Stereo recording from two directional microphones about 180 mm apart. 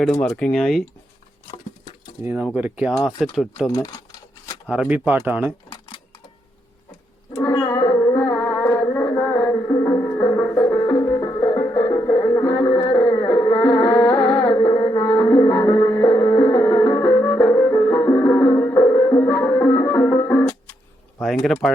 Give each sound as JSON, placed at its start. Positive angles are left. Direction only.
{"t": 0.2, "sound": "speech", "side_deg": 5}
{"t": 2.2, "sound": "speech", "side_deg": -10}
{"t": 3.7, "sound": "speech", "side_deg": 20}
{"t": 4.7, "sound": "speech", "side_deg": -5}
{"t": 7.5, "sound": "music", "side_deg": 25}
{"t": 21.4, "sound": "speech", "side_deg": 0}